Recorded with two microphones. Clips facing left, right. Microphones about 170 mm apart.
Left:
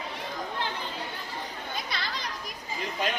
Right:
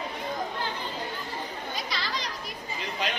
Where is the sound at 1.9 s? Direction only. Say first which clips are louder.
Right 2 dB; 55° left (ahead or behind).